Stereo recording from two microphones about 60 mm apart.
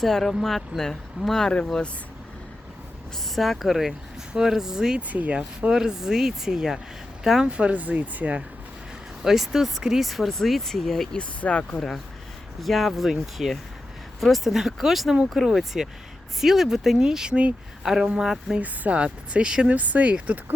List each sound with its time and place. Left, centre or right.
0.0 s speech: centre
3.3 s speech: centre
4.9 s speech: right
5.4 s speech: centre
7.5 s speech: right
9.2 s speech: centre
11.2 s speech: left
12.5 s speech: centre
18.6 s speech: right